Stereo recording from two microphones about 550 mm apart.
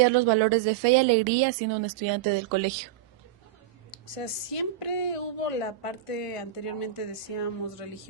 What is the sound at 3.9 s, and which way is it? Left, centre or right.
A woman's voice, left.